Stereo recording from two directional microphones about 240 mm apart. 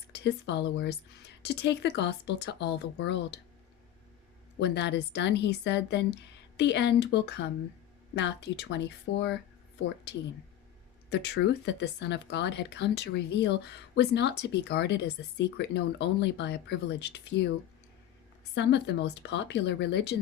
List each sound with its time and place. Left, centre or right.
0.1 s a woman's voice: left
4.6 s a woman's voice: left
11.1 s a woman's voice: left
18.5 s a woman's voice: left